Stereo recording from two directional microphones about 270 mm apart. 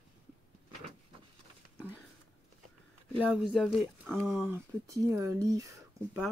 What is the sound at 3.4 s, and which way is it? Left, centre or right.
Speech, centre.